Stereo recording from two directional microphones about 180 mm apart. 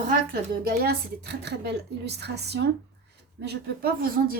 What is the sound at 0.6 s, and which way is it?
A woman's voice, 60° right (ahead or behind).